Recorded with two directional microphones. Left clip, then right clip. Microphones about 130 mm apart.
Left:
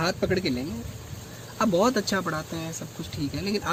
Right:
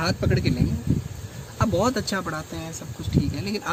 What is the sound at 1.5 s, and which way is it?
Speech, 25° left (ahead or behind).